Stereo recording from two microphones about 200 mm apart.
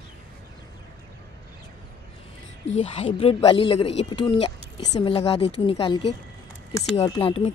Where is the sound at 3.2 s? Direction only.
25° left (ahead or behind).